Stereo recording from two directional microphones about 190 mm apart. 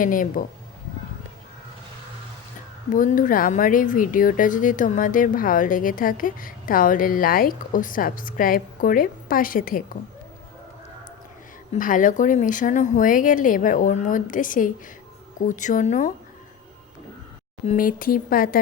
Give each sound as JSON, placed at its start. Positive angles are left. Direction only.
{"t": 0.0, "sound": "speech", "side_deg": 45}
{"t": 2.9, "sound": "speech", "side_deg": 45}
{"t": 11.7, "sound": "speech", "side_deg": 45}
{"t": 17.7, "sound": "speech", "side_deg": 45}